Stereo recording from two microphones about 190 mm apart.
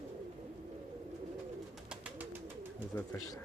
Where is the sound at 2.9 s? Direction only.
20° left (ahead or behind).